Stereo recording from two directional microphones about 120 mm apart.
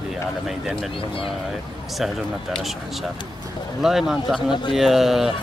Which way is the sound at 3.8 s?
Centre (ahead or behind).